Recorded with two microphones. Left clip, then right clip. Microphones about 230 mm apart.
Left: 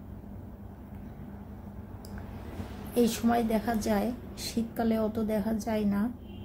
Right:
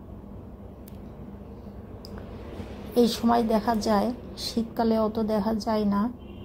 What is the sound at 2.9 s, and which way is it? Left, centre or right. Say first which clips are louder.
A woman's voice: right 5 dB; centre.